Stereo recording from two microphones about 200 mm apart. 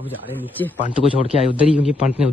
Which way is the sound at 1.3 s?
30° left (ahead or behind).